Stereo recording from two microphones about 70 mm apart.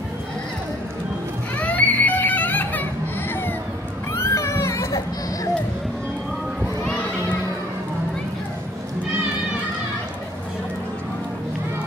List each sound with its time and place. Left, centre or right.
1.6 s baby cry: left
4.1 s children playing: left